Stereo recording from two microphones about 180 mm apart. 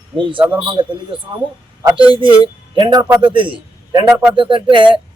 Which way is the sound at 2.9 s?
10° right (ahead or behind).